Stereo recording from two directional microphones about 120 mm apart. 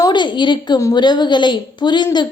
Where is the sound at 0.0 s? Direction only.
40° left (ahead or behind).